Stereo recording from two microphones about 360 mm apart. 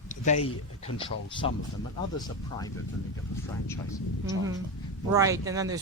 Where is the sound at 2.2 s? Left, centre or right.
Centre.